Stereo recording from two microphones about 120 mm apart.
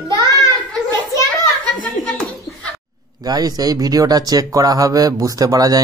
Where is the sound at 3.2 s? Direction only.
35° right (ahead or behind).